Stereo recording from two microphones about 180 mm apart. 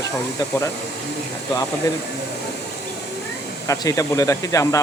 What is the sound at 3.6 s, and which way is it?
Speech, 20° left (ahead or behind).